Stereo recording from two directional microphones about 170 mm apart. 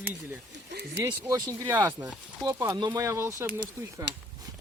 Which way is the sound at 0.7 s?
75° right (ahead or behind).